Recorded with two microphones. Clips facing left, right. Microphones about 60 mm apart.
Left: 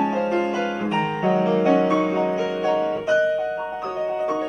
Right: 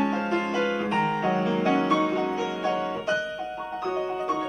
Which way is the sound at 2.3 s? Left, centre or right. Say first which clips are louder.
Left 5 dB; centre.